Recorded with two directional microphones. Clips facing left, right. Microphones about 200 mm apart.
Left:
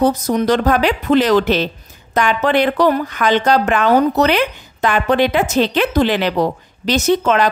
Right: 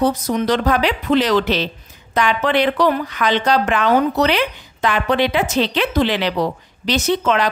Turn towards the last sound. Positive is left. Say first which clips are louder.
# left 3 dB
turn(degrees=45)  # may be behind; listen again after turning